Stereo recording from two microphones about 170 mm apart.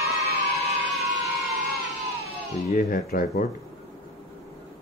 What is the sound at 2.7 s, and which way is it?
Speech, 60° left (ahead or behind).